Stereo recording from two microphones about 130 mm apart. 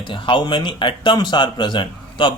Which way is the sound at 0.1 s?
40° left (ahead or behind).